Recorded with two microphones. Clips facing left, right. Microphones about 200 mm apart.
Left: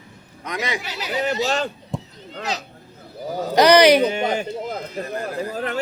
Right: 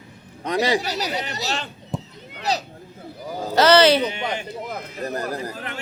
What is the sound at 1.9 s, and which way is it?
Chop, centre (ahead or behind).